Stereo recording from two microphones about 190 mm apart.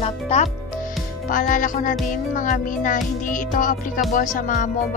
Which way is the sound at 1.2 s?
45° left (ahead or behind).